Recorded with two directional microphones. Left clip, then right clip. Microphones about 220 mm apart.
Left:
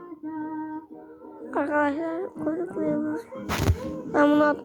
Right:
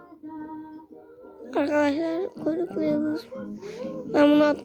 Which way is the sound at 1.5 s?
20° right (ahead or behind).